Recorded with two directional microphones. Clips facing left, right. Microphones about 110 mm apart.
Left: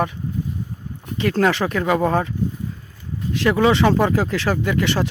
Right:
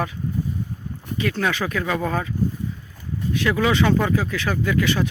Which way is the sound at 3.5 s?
30° left (ahead or behind).